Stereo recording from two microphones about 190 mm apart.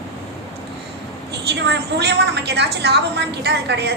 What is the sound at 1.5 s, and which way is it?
A woman's voice, 65° right (ahead or behind).